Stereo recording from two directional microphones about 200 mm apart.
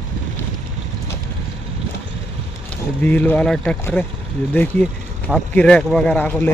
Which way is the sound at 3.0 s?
10° left (ahead or behind).